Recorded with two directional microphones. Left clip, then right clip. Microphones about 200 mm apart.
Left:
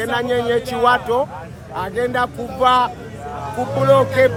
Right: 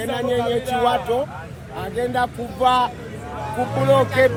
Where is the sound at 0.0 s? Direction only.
40° left (ahead or behind).